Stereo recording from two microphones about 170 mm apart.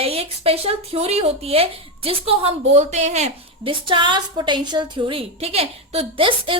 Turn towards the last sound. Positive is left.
turn(degrees=-30)  # may be behind; listen again after turning